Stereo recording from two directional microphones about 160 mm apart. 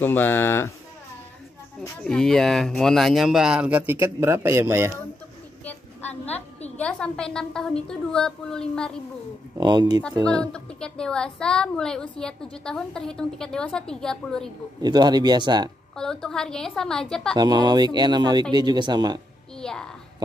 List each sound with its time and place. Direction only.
0.0 s speech: 10° left (ahead or behind)
2.0 s a woman's voice: 5° left (ahead or behind); by 4.9 s 15° right (ahead or behind)
6.8 s a woman's voice: 5° left (ahead or behind)
9.6 s speech: 25° right (ahead or behind)
10.2 s a woman's voice: 5° left (ahead or behind)
14.8 s speech: 25° right (ahead or behind)
16.0 s a woman's voice: 5° left (ahead or behind)
17.4 s speech: 25° right (ahead or behind)
19.6 s a child's voice: 5° left (ahead or behind)